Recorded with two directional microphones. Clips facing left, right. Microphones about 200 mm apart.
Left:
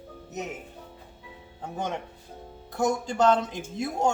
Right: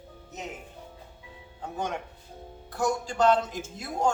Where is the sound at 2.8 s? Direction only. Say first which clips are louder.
Left 1 dB; 20° left (ahead or behind).